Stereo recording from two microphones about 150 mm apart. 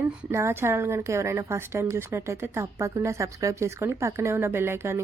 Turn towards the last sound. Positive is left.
turn(degrees=-15)  # may be behind; listen again after turning